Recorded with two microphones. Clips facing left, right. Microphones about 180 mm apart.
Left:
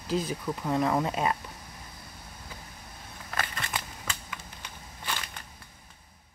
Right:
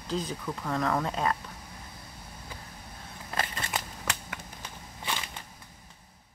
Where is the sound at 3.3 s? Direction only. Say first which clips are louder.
Right 1 dB; 25° right (ahead or behind).